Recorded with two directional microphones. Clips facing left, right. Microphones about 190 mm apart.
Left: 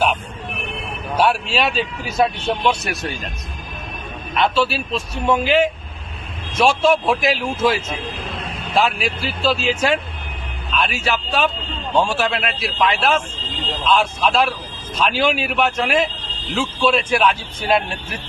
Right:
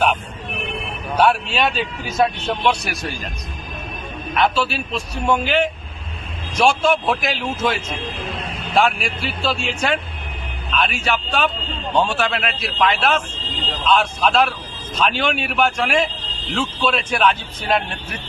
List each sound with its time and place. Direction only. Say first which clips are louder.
1.1 s speech: right 1 dB; 5° left (ahead or behind)
4.4 s a man's voice: left 1 dB; centre (ahead or behind)